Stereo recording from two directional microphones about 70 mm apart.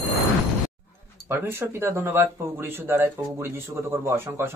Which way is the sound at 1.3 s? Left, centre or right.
Right.